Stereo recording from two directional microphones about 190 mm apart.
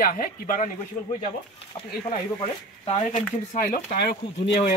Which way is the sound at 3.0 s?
45° left (ahead or behind).